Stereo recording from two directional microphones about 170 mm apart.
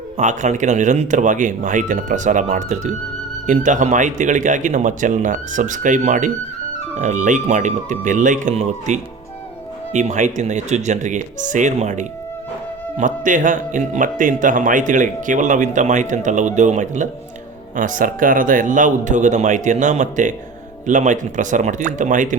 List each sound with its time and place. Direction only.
0.2 s speech: 45° right (ahead or behind)